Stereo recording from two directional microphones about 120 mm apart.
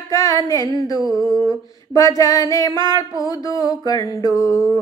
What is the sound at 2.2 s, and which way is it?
Music, 30° left (ahead or behind).